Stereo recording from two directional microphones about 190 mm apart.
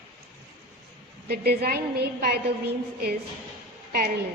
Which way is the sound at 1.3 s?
55° right (ahead or behind).